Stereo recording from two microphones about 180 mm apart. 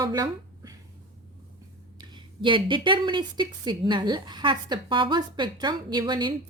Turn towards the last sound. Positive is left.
turn(degrees=-25)  # may be behind; listen again after turning